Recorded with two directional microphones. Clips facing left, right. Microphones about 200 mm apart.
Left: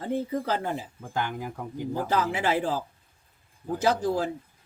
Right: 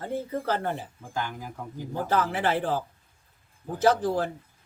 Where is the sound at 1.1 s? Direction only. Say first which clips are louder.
Left 3 dB; 60° left (ahead or behind).